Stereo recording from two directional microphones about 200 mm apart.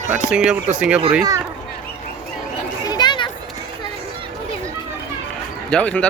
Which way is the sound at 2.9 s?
20° left (ahead or behind).